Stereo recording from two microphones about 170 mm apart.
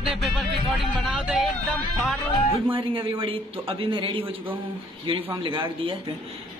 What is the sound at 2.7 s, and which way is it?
A man's voice, 30° right (ahead or behind).